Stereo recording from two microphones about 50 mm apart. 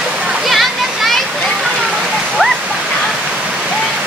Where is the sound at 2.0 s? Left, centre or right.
Centre.